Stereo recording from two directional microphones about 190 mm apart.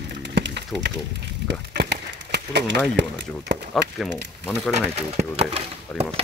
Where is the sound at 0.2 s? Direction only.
60° right (ahead or behind).